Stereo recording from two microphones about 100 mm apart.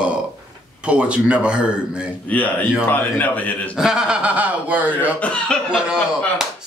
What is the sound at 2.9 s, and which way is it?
Speech, 15° left (ahead or behind).